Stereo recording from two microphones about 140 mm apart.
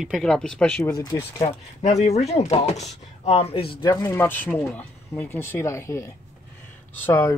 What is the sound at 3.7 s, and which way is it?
Speech, 30° left (ahead or behind).